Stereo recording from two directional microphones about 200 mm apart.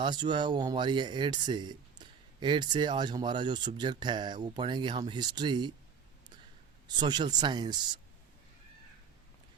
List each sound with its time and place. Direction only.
0.0 s speech: 20° right (ahead or behind)
6.8 s speech: 20° right (ahead or behind)